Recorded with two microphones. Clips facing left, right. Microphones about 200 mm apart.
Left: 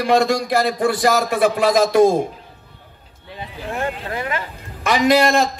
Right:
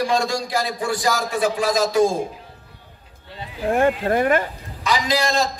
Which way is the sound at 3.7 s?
50° right (ahead or behind).